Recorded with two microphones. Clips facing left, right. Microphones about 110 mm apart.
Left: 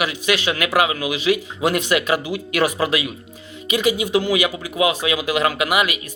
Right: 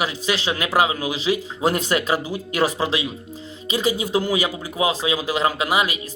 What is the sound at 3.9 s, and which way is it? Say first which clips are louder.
Speech: left 3 dB; 40° right (ahead or behind).